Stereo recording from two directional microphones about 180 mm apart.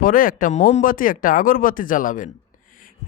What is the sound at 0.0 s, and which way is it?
Speech, 50° left (ahead or behind).